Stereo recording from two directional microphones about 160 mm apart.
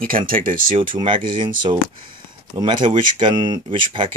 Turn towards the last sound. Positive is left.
turn(degrees=-30)  # may be behind; listen again after turning